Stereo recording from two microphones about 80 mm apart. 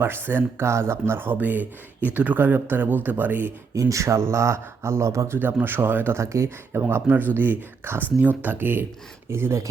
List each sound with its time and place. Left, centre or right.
0.0 s speech: right
3.8 s speech: right
5.4 s speech: right